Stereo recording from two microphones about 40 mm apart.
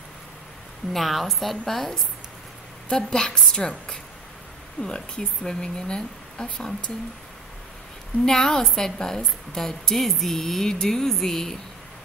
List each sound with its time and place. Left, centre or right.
0.9 s a woman's voice: centre
2.9 s speech: centre
8.3 s a woman's voice: centre